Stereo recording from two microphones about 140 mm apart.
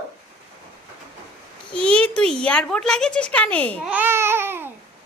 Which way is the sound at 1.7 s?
5° left (ahead or behind).